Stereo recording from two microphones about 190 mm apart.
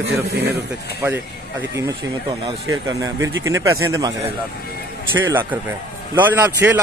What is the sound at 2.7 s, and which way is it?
A man's voice, 15° right (ahead or behind).